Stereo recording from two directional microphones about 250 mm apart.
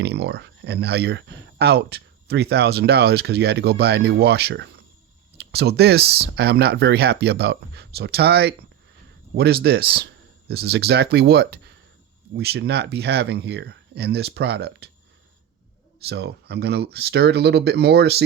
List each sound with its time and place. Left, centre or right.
0.0 s speech: right
16.0 s speech: right